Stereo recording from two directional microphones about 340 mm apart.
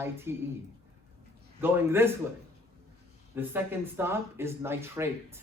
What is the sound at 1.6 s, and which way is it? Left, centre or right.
Speech, centre.